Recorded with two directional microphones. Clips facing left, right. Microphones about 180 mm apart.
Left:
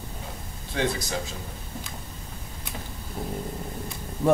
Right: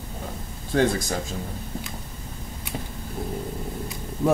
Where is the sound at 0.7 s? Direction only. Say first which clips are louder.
Right 6 dB; 50° right (ahead or behind).